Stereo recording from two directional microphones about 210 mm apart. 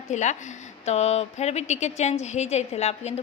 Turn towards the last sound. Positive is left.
turn(degrees=30)  # may be behind; listen again after turning